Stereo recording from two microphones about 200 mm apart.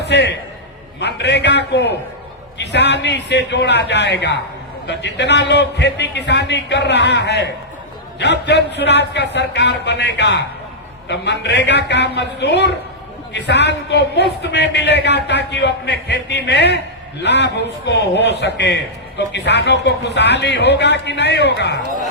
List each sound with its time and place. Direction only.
0.0 s a man's voice: 60° left (ahead or behind)